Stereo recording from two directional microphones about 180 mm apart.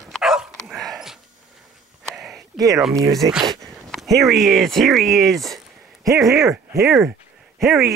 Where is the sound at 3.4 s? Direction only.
20° right (ahead or behind).